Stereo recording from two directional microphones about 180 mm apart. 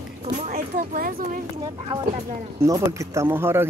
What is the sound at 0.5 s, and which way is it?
Speech, 50° right (ahead or behind).